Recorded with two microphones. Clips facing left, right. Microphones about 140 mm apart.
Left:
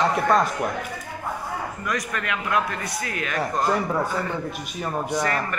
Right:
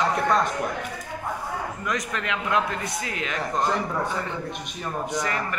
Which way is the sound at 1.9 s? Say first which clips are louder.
Left 1 dB; 20° right (ahead or behind).